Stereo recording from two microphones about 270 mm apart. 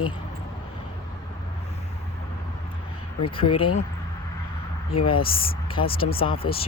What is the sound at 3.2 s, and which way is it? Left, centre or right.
Speech, centre.